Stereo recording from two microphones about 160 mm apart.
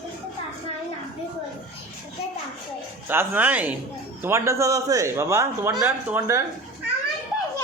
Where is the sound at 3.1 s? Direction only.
10° right (ahead or behind).